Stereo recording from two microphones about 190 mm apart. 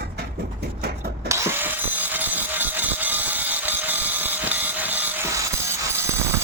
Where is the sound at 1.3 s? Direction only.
10° right (ahead or behind).